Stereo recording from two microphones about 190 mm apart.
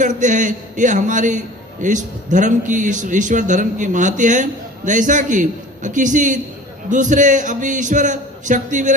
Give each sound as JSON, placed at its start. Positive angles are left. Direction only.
{"t": 0.0, "sound": "a man's voice", "side_deg": -40}